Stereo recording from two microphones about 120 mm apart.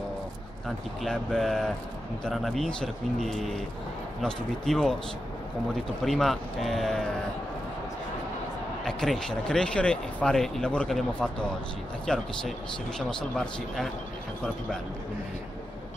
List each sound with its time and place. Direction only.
1.0 s speech: 5° left (ahead or behind)
8.8 s speech: 5° left (ahead or behind)